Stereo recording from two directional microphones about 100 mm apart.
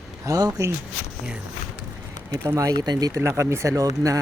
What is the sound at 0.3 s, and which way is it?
Speech, 35° right (ahead or behind).